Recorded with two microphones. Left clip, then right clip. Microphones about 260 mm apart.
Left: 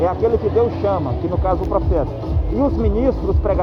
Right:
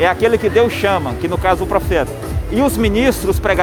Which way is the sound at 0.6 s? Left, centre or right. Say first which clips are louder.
Right 4 dB; right.